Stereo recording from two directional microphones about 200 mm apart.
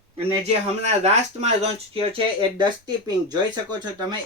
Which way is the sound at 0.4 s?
30° right (ahead or behind).